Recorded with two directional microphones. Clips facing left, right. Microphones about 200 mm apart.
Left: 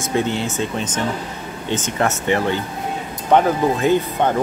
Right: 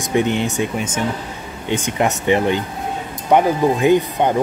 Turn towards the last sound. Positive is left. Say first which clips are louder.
# right 2 dB
turn(degrees=-15)  # may be behind; listen again after turning